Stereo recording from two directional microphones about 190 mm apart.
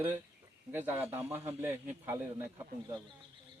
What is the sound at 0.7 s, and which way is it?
Speech, 10° right (ahead or behind).